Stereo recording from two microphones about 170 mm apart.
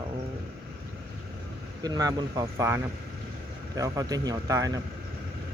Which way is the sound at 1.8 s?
20° right (ahead or behind).